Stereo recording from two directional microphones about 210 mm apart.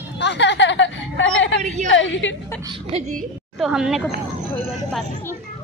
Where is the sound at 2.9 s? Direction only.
35° right (ahead or behind).